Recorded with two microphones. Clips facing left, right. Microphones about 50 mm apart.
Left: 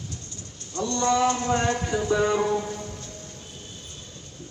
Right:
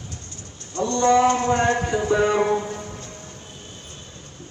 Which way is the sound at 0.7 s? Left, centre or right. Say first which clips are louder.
Right 6 dB; right.